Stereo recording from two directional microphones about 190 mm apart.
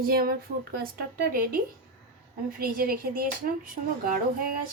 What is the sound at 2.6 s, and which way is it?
Speech, 50° right (ahead or behind).